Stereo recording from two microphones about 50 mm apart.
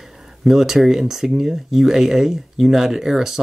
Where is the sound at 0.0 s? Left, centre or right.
Centre.